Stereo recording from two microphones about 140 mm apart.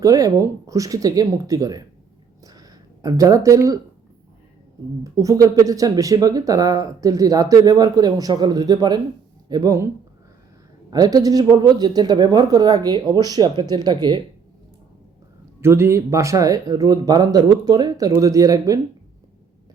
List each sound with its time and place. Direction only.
0.0 s speech: 25° right (ahead or behind)
2.4 s a sound: 25° right (ahead or behind)
5.0 s speech: 25° right (ahead or behind)
10.9 s speech: 25° right (ahead or behind)
15.6 s speech: 20° right (ahead or behind)